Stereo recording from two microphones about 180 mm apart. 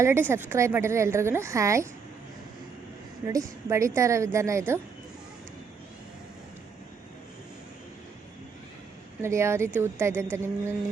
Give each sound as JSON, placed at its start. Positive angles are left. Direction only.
{"t": 0.0, "sound": "a woman's voice", "side_deg": -15}
{"t": 3.7, "sound": "a woman's voice", "side_deg": -15}
{"t": 9.2, "sound": "a woman's voice", "side_deg": -15}